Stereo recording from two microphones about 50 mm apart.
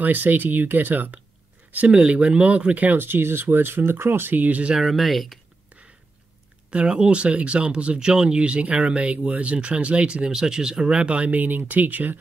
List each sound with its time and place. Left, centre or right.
0.0 s speech: right
2.1 s speech: right
4.4 s speech: right
4.7 s speech: centre
6.7 s speech: right